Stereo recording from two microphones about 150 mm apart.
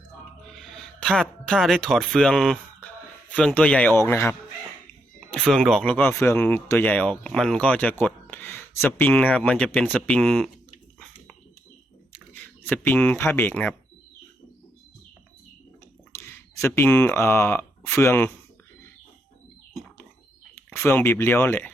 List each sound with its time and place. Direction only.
0.5 s speech: 5° left (ahead or behind)
5.3 s speech: 5° left (ahead or behind)
12.3 s speech: 10° left (ahead or behind)
16.1 s speech: 15° left (ahead or behind)
20.7 s speech: 15° left (ahead or behind)